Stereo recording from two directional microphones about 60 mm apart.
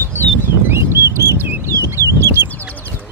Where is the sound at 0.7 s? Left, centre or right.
Right.